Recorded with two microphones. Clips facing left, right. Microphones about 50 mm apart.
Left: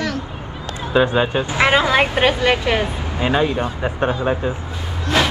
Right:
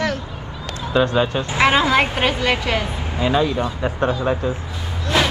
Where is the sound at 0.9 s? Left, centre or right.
Centre.